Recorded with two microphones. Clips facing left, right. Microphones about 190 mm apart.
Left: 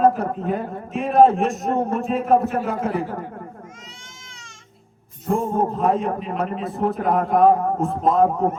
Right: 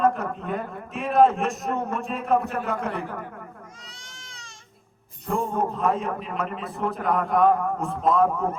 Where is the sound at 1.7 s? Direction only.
35° left (ahead or behind).